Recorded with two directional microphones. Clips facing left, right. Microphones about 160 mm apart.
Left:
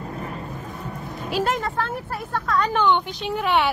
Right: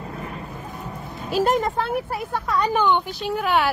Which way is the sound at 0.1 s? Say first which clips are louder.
Left 1 dB; 35° left (ahead or behind).